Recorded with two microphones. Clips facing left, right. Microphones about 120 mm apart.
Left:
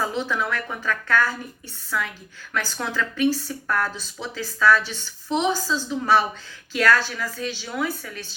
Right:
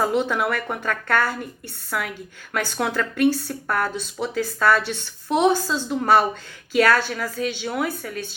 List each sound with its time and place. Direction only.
0.2 s speech: 65° right (ahead or behind)